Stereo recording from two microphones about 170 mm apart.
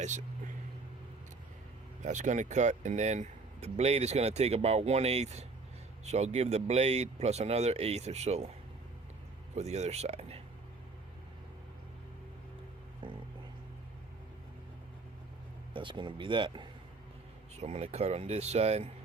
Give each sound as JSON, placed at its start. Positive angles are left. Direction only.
{"t": 2.0, "sound": "speech", "side_deg": -45}
{"t": 9.6, "sound": "speech", "side_deg": -40}
{"t": 13.0, "sound": "music", "side_deg": -30}
{"t": 15.7, "sound": "speech", "side_deg": -30}
{"t": 17.6, "sound": "speech", "side_deg": -40}